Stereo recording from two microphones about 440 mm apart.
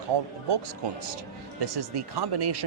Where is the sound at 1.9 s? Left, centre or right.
Right.